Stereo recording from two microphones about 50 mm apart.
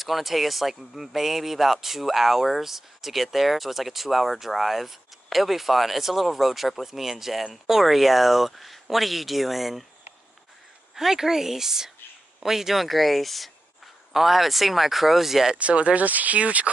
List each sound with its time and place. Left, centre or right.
0.0 s speech: centre
11.0 s speech: centre
15.5 s speech: right